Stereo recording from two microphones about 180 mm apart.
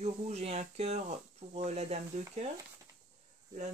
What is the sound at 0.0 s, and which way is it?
Speech, 35° right (ahead or behind).